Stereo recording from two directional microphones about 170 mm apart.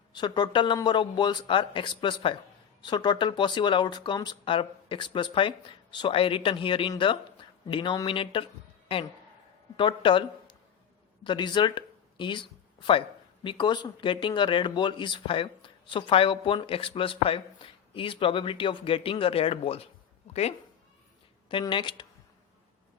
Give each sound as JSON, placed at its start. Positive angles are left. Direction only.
{"t": 0.1, "sound": "speech", "side_deg": 25}
{"t": 9.7, "sound": "speech", "side_deg": 30}
{"t": 21.5, "sound": "speech", "side_deg": 30}